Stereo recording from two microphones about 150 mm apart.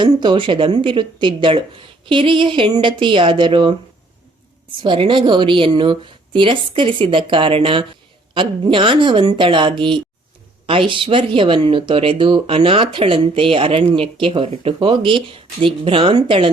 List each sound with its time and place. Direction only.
0.0 s speech: 30° right (ahead or behind)
4.8 s speech: 35° right (ahead or behind)